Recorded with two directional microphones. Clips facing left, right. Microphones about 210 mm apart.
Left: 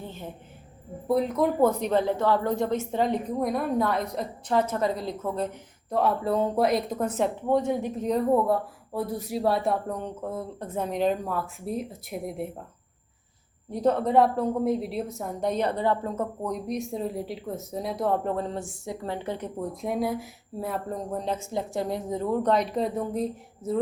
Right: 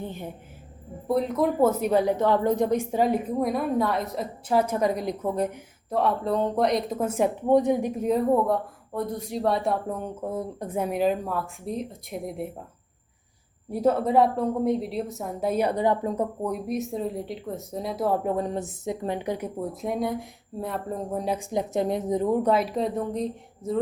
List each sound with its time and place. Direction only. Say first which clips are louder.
0.0 s a woman's voice: right 4 dB; 15° right (ahead or behind)
1.0 s a woman's voice: even; centre (ahead or behind)
5.9 s a woman's voice: even; centre (ahead or behind)
13.7 s a woman's voice: right 1 dB; 5° right (ahead or behind)